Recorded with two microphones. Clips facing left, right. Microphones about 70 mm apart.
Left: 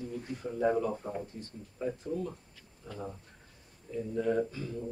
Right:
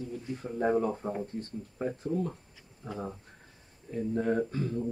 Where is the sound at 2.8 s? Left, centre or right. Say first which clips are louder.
Right 4 dB; right.